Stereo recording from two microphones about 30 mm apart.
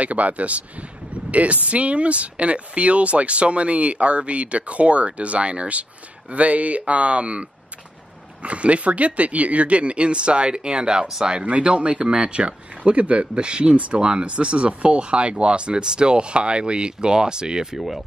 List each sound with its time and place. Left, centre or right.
0.0 s speech: right
13.4 s speech: right
17.7 s speech: centre